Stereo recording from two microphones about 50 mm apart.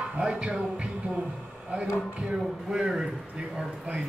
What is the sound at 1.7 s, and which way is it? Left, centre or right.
Speech, right.